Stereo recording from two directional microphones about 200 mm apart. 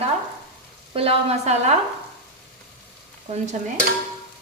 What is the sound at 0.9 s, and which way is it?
Speech, 30° right (ahead or behind).